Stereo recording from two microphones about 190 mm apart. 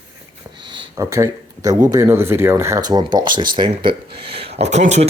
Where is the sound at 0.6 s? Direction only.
25° right (ahead or behind).